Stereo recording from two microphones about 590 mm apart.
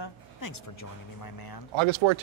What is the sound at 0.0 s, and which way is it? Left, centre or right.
Speech, left.